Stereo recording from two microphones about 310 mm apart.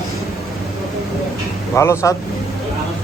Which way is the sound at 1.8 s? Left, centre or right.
Centre.